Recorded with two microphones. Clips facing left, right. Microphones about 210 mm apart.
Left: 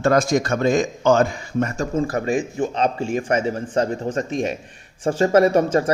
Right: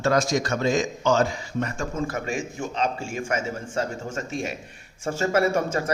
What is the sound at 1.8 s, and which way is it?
Speech, 35° left (ahead or behind).